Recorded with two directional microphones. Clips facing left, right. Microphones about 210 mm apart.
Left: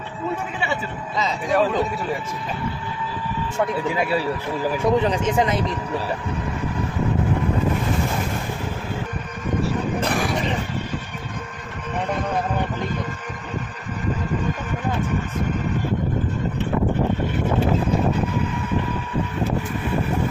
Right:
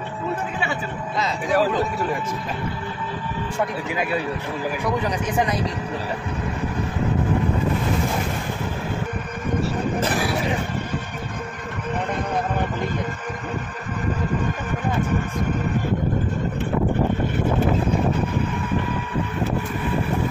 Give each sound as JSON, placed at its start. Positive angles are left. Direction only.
{"t": 1.2, "sound": "speech", "side_deg": 0}
{"t": 3.9, "sound": "speech", "side_deg": 30}